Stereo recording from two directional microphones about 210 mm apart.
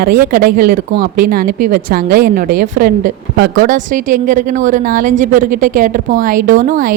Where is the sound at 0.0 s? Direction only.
45° right (ahead or behind).